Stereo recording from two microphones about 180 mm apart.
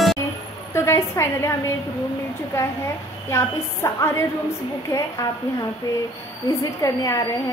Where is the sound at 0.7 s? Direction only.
15° left (ahead or behind).